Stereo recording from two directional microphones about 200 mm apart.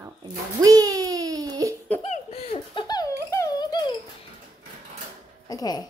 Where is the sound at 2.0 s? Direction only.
30° left (ahead or behind).